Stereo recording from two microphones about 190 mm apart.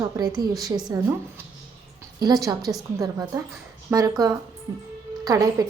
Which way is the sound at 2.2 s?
20° right (ahead or behind).